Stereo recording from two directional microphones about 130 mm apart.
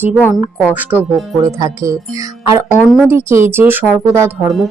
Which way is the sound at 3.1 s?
20° right (ahead or behind).